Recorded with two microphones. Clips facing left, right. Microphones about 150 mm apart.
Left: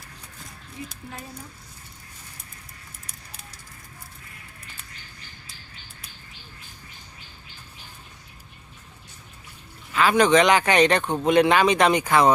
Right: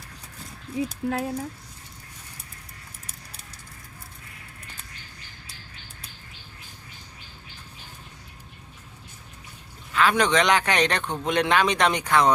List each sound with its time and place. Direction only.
1.1 s speech: 75° right (ahead or behind)
9.9 s speech: 5° left (ahead or behind)